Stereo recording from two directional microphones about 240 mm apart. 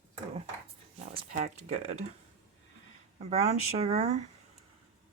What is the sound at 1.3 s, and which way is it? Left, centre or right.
Speech, right.